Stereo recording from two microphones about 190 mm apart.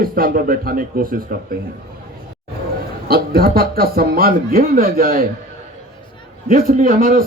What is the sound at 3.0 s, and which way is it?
Speech, 55° right (ahead or behind).